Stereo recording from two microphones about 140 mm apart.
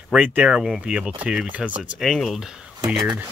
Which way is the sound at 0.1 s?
10° right (ahead or behind).